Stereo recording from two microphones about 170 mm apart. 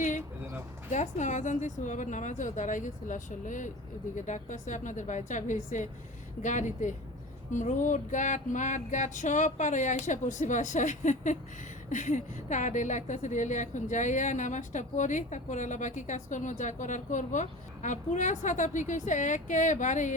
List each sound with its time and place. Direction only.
0.9 s a woman's voice: 45° left (ahead or behind)